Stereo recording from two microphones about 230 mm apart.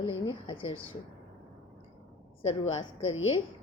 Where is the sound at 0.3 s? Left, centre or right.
Left.